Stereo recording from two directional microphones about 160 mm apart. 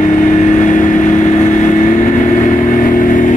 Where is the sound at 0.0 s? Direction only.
50° left (ahead or behind).